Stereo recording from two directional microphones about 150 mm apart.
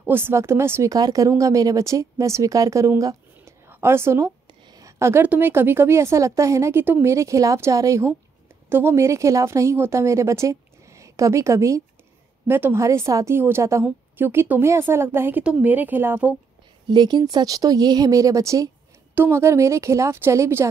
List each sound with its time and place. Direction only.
0.0 s a woman's voice: 15° right (ahead or behind)
16.8 s a woman's voice: 30° right (ahead or behind)